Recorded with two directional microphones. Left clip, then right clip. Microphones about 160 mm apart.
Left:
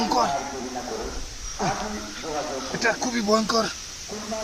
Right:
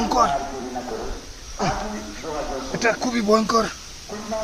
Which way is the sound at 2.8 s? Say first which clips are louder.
Right 3 dB; 50° right (ahead or behind).